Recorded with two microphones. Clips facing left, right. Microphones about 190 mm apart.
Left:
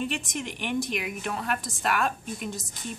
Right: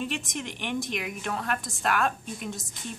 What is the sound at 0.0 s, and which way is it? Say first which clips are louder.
A woman's voice: left 1 dB; centre (ahead or behind).